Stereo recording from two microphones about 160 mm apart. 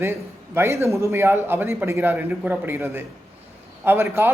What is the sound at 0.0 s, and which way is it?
A man's voice, 15° right (ahead or behind).